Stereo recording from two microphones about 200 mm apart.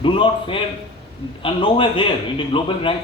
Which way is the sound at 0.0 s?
25° left (ahead or behind).